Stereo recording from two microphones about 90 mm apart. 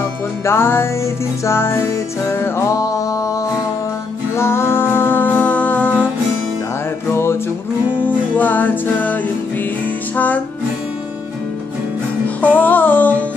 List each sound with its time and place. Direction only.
0.5 s music: 25° left (ahead or behind)
7.1 s music: 30° left (ahead or behind)
8.4 s music: 20° left (ahead or behind)
12.4 s music: 20° left (ahead or behind)